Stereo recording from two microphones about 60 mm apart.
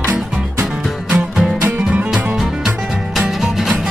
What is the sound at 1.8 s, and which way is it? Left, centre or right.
Music, right.